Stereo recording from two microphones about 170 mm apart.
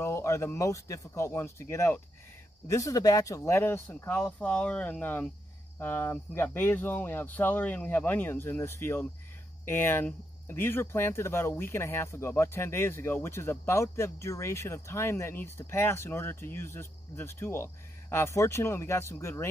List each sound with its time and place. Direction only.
0.0 s speech: 15° left (ahead or behind)